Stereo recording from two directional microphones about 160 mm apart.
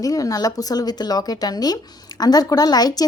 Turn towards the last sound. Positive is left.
turn(degrees=25)  # may be behind; listen again after turning